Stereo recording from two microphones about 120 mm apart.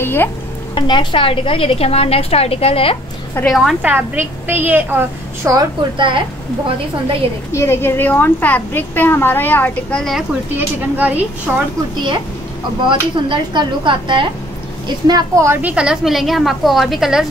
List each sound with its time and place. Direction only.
0.0 s a woman's voice: 20° left (ahead or behind)
0.7 s a woman's voice: 40° left (ahead or behind)
3.4 s a woman's voice: centre (ahead or behind)
3.8 s a woman's voice: 15° right (ahead or behind)
5.9 s speech: 45° right (ahead or behind)
7.5 s a woman's voice: 20° left (ahead or behind); by 10.2 s 5° left (ahead or behind)
10.5 s a woman's voice: 15° right (ahead or behind)
12.8 s a woman's voice: 40° right (ahead or behind); by 15.7 s 20° right (ahead or behind)
15.7 s a woman's voice: 5° right (ahead or behind)